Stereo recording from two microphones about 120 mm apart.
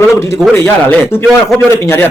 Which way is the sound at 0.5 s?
15° left (ahead or behind).